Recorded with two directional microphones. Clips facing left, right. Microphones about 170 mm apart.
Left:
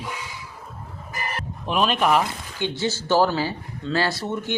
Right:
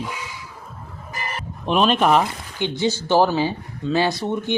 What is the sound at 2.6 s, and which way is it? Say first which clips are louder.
Speech: right 4 dB; 15° right (ahead or behind).